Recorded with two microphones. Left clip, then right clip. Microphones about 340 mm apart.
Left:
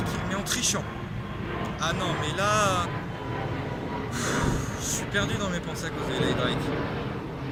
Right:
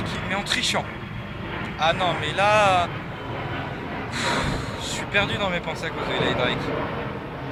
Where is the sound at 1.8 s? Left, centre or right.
Centre.